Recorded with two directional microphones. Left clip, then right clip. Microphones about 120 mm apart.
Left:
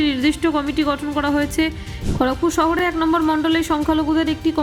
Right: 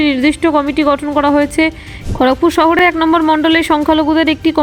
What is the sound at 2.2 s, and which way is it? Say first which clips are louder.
A woman's voice: right 8 dB; 50° right (ahead or behind).